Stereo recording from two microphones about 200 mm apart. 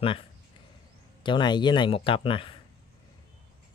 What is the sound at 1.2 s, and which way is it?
Speech, 20° left (ahead or behind).